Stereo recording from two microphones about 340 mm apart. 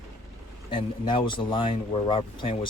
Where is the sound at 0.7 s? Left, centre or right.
Centre.